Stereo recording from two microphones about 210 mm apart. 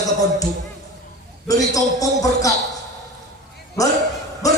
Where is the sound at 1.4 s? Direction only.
15° left (ahead or behind).